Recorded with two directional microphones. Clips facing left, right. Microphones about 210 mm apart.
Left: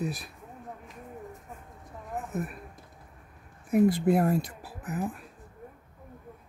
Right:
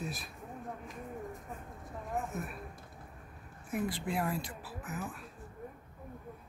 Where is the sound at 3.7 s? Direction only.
40° left (ahead or behind).